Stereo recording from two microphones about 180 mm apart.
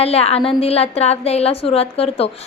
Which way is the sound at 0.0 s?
35° left (ahead or behind).